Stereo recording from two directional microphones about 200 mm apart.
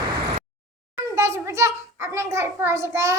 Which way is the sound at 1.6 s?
15° right (ahead or behind).